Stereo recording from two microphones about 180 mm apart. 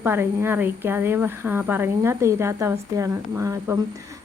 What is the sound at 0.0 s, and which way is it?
Speech, 15° right (ahead or behind).